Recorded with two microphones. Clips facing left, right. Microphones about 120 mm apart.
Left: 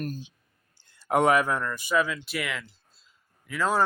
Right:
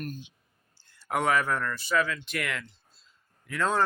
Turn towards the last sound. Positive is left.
turn(degrees=5)  # may be behind; listen again after turning